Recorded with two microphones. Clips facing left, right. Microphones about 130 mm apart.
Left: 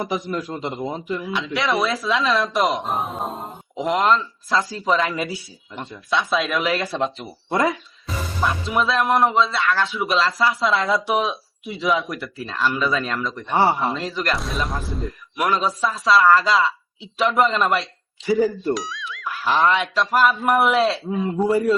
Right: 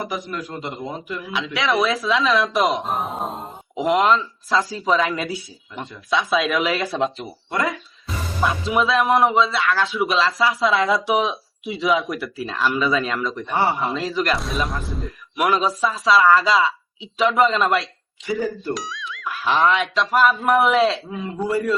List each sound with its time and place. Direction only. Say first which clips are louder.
0.1 s a man's voice: left 3 dB; 25° left (ahead or behind)
1.3 s speech: right 1 dB; centre (ahead or behind)
13.5 s a man's voice: left 3 dB; 25° left (ahead or behind)
13.8 s speech: right 1 dB; centre (ahead or behind)
21.4 s a man's voice: left 3 dB; 30° left (ahead or behind)